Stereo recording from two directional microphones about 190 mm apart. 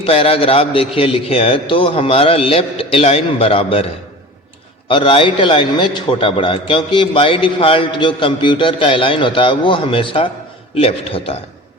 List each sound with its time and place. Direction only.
0.0 s a man's voice: 30° left (ahead or behind)
4.9 s a man's voice: 30° left (ahead or behind)